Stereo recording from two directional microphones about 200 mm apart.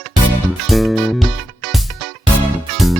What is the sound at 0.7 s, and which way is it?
Speech, centre (ahead or behind).